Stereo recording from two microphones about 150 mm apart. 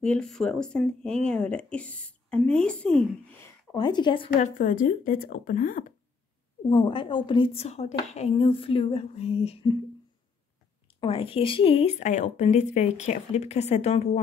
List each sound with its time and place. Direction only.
0.0 s speech: 5° left (ahead or behind)
3.7 s a woman's voice: 30° left (ahead or behind)
4.4 s speech: 60° left (ahead or behind)
6.7 s a woman's voice: 35° left (ahead or behind)
11.0 s speech: 35° left (ahead or behind)